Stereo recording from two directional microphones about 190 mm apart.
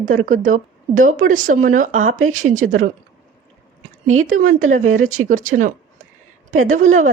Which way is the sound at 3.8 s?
90° right.